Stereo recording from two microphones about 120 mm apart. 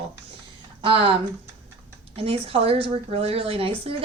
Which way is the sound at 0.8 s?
50° right (ahead or behind).